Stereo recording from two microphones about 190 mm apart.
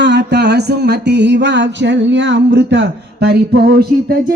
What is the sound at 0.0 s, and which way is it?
Music, 65° right (ahead or behind).